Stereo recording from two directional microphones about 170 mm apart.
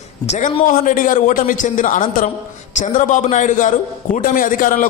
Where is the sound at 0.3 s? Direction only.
45° left (ahead or behind).